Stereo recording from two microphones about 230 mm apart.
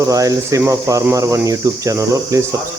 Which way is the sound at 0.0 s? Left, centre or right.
Centre.